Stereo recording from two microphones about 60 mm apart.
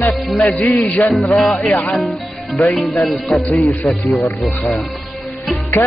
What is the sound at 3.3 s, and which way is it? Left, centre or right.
Speech, left.